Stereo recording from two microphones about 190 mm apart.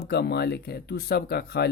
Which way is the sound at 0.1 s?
60° left (ahead or behind).